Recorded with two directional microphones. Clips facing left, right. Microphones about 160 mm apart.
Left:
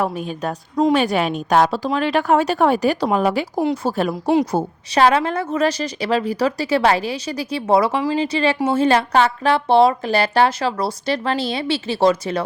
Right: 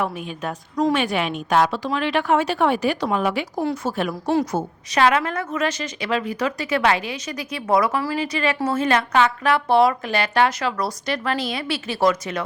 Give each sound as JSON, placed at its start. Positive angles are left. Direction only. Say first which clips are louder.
{"t": 0.0, "sound": "a woman's voice", "louder": "left 4 dB", "side_deg": 35}
{"t": 4.1, "sound": "a woman's voice", "louder": "left 4 dB", "side_deg": 15}
{"t": 4.5, "sound": "a woman's voice", "louder": "left 4 dB", "side_deg": 35}